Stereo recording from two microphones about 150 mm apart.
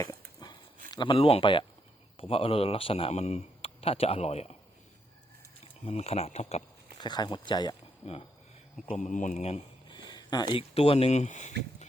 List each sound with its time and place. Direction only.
0.9 s speech: 30° left (ahead or behind)
5.8 s speech: 45° left (ahead or behind)
7.0 s speech: 30° left (ahead or behind)
8.0 s speech: 40° left (ahead or behind)
9.0 s speech: 55° left (ahead or behind)
9.9 s speech: 30° left (ahead or behind); by 11.9 s 50° left (ahead or behind)